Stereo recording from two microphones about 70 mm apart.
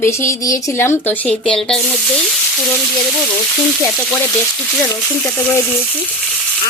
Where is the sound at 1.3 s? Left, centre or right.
Centre.